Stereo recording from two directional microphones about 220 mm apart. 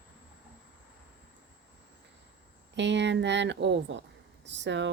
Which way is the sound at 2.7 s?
55° right (ahead or behind).